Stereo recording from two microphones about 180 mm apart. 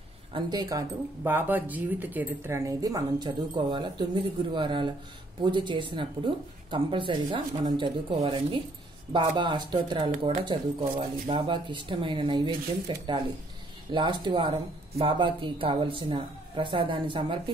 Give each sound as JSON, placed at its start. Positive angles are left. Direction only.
{"t": 0.3, "sound": "speech", "side_deg": -20}